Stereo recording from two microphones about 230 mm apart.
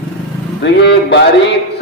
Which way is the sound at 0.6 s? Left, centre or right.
Left.